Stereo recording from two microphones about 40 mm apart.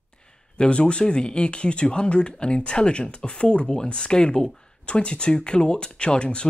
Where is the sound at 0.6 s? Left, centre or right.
Left.